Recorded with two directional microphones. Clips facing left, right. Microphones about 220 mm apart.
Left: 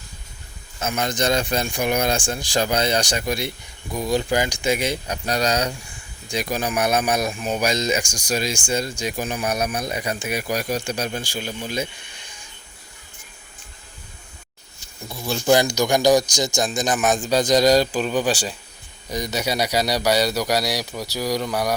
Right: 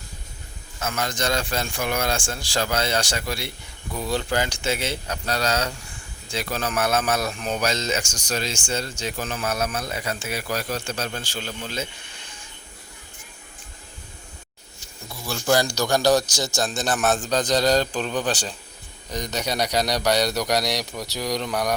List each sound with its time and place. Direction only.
0.8 s a man's voice: 20° left (ahead or behind)
15.1 s a man's voice: 20° left (ahead or behind)